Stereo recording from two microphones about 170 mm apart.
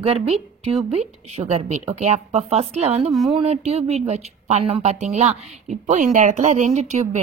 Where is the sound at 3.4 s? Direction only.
40° right (ahead or behind).